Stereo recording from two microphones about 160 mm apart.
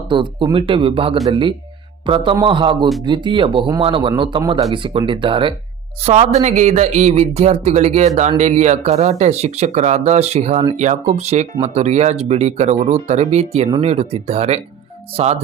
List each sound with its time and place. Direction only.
0.1 s a man's voice: 30° right (ahead or behind)
6.0 s speech: 45° right (ahead or behind)